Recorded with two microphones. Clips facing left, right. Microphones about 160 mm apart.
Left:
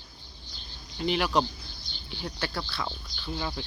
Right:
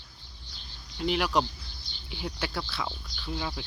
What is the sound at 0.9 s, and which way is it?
Speech, centre (ahead or behind).